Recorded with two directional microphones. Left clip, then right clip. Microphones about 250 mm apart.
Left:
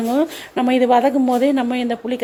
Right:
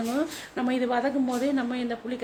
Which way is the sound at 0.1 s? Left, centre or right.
Left.